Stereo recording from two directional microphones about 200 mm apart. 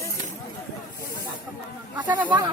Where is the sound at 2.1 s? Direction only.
10° right (ahead or behind).